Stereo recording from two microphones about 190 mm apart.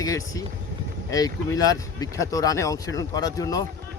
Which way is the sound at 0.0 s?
20° left (ahead or behind).